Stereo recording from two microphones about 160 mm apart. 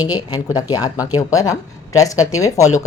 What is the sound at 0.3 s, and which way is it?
A woman's voice, 25° left (ahead or behind).